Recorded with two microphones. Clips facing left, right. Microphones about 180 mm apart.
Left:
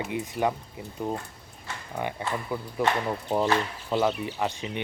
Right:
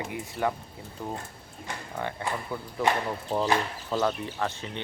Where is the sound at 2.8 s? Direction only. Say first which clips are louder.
Even; 15° right (ahead or behind).